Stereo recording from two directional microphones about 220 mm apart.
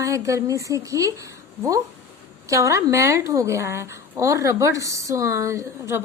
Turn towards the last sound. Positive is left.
turn(degrees=-10)  # may be behind; listen again after turning